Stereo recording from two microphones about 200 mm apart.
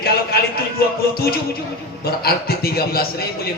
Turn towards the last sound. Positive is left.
turn(degrees=50)  # may be behind; listen again after turning